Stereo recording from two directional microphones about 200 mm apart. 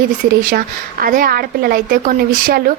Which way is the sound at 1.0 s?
45° right (ahead or behind).